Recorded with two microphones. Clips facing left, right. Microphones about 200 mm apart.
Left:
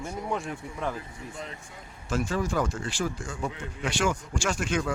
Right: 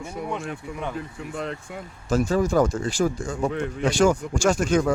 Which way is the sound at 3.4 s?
65° right (ahead or behind).